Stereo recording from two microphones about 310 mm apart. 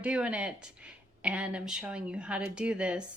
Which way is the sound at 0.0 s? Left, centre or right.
Centre.